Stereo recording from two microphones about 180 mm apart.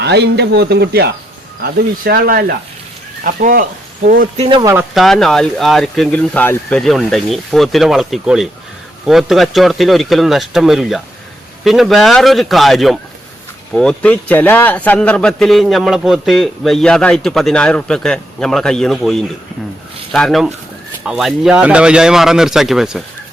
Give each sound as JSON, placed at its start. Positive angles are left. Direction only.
{"t": 0.0, "sound": "speech", "side_deg": -70}
{"t": 4.4, "sound": "speech", "side_deg": -25}
{"t": 4.9, "sound": "a man's voice", "side_deg": 0}